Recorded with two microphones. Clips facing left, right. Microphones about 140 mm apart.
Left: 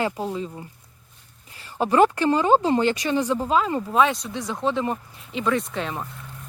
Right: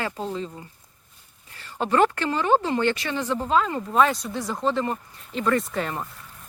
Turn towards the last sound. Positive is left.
turn(degrees=0)  # may be behind; listen again after turning